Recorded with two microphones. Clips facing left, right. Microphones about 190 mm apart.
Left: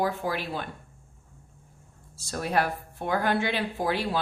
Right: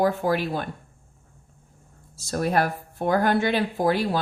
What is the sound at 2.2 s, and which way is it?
Speech, 40° right (ahead or behind).